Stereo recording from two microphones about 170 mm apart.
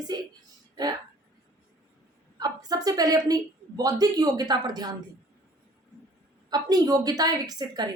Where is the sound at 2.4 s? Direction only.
25° right (ahead or behind).